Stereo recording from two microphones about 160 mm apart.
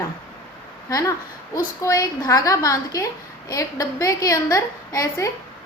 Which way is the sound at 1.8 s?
20° left (ahead or behind).